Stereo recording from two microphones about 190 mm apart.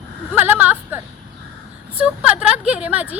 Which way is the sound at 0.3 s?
10° right (ahead or behind).